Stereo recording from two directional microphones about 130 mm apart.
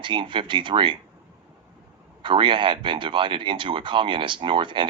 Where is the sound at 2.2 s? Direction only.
40° right (ahead or behind).